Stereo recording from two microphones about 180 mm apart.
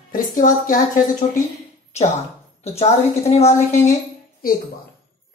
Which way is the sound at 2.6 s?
35° left (ahead or behind).